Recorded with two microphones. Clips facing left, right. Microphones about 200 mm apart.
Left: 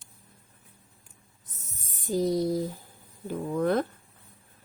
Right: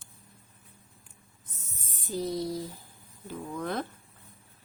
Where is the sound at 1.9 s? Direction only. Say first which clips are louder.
Left 6 dB; 50° left (ahead or behind).